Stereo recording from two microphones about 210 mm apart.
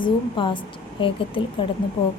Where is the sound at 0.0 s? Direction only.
25° left (ahead or behind).